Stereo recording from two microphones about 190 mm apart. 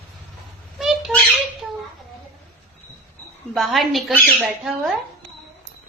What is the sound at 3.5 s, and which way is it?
Speech, centre (ahead or behind).